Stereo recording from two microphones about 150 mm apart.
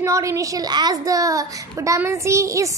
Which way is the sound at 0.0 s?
20° right (ahead or behind).